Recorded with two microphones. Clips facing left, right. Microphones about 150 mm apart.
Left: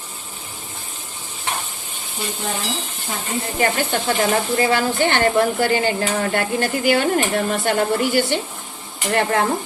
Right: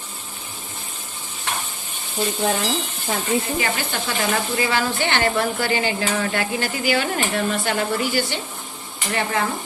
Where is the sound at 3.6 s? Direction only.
45° left (ahead or behind).